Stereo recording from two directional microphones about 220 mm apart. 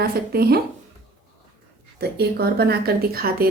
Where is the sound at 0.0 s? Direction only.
45° right (ahead or behind).